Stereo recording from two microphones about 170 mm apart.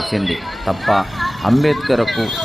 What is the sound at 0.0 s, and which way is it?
Speech, centre (ahead or behind).